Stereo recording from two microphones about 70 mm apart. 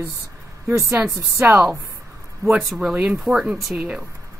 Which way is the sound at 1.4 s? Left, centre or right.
Right.